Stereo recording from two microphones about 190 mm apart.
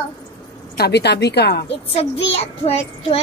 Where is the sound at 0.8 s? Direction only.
60° left (ahead or behind).